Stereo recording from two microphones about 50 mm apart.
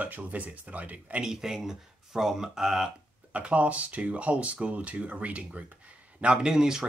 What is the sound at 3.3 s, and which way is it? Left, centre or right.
Speech, right.